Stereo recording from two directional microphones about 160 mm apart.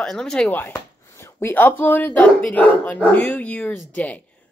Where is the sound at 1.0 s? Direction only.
15° left (ahead or behind).